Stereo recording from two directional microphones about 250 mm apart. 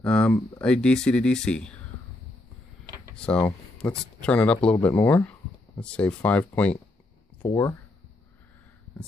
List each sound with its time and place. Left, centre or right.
0.0 s speech: centre
3.2 s speech: centre